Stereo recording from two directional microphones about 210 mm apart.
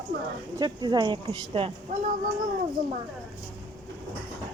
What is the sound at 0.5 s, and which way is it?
Speech, 20° right (ahead or behind).